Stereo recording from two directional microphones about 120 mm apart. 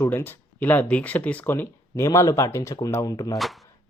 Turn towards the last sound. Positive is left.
turn(degrees=0)  # may be behind; listen again after turning